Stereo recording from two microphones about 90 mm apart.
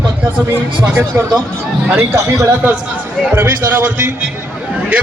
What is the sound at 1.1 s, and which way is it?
Speech, 20° right (ahead or behind).